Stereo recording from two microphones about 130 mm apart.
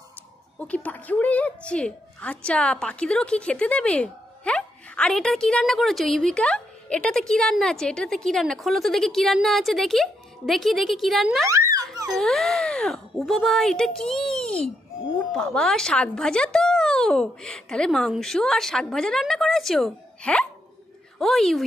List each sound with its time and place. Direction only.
0.6 s a woman's voice: 10° left (ahead or behind)
11.4 s a sound: 25° right (ahead or behind)
12.1 s a woman's voice: 5° left (ahead or behind)